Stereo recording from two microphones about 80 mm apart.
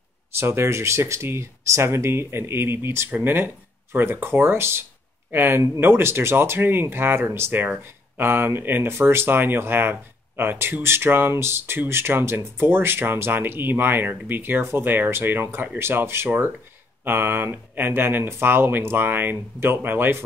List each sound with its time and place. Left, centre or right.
0.3 s speech: right